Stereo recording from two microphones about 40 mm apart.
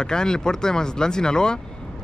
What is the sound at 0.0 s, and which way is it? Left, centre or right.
Speech, centre.